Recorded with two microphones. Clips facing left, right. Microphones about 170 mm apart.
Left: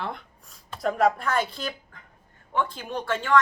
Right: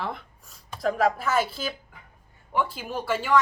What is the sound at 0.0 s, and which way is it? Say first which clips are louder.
Speech: right 1 dB; centre (ahead or behind).